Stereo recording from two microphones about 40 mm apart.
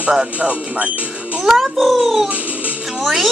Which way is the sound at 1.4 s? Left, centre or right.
Centre.